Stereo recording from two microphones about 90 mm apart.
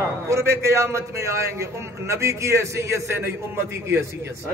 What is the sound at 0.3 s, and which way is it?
A man's voice, 30° right (ahead or behind).